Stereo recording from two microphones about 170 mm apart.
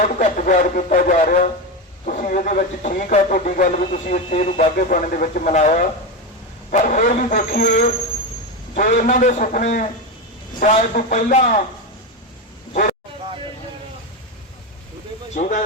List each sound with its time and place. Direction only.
0.0 s speech: 45° left (ahead or behind)
15.4 s speech: 45° left (ahead or behind)